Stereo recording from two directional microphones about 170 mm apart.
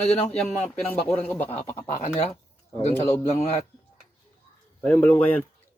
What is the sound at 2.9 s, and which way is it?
Speech, 15° left (ahead or behind).